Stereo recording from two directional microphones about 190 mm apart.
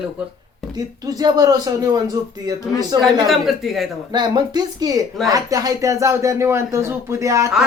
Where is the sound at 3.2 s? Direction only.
Centre (ahead or behind).